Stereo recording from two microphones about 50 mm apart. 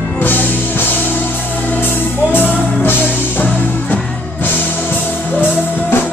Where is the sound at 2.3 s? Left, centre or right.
Left.